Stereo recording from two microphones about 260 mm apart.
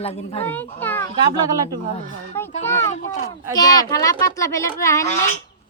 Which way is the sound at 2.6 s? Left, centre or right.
Centre.